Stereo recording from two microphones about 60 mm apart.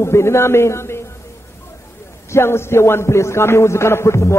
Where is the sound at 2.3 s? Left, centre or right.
Left.